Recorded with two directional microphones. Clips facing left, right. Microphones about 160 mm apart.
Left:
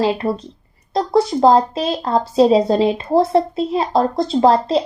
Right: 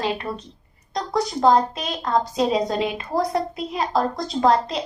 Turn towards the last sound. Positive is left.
turn(degrees=30)  # may be behind; listen again after turning